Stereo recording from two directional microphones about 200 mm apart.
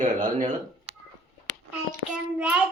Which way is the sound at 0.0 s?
40° right (ahead or behind).